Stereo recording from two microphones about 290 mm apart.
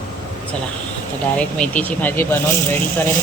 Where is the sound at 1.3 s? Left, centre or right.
Centre.